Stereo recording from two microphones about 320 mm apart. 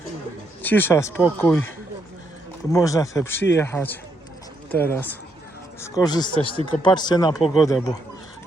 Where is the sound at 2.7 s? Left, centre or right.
Centre.